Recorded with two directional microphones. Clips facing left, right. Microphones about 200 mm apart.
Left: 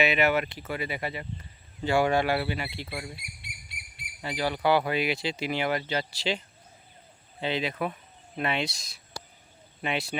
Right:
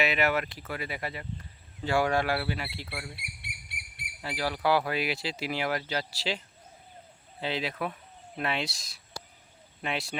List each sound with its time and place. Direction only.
0.0 s speech: centre (ahead or behind)
3.2 s bird: 65° right (ahead or behind)
4.2 s speech: centre (ahead or behind)
7.4 s speech: centre (ahead or behind)